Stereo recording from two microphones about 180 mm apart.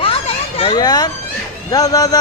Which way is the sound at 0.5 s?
25° left (ahead or behind).